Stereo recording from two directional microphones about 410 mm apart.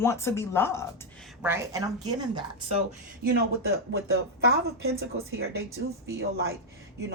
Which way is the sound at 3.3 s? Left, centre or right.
Right.